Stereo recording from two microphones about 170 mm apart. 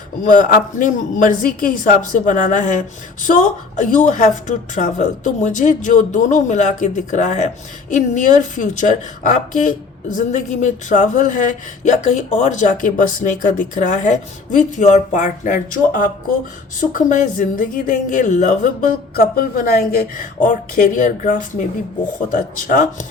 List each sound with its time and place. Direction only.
0.3 s a woman's voice: 50° left (ahead or behind)
19.4 s a woman's voice: 55° left (ahead or behind)